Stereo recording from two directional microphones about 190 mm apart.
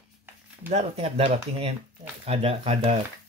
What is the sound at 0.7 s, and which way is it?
Speech, 35° right (ahead or behind).